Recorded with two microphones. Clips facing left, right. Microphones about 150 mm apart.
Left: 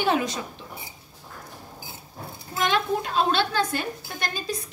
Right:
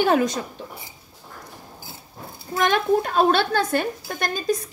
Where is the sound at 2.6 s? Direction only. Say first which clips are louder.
Right 5 dB; 50° right (ahead or behind).